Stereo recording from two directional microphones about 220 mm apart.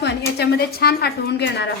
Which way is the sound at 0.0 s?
50° left (ahead or behind).